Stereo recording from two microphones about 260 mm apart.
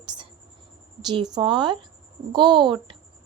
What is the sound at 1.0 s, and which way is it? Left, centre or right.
A woman's voice, centre.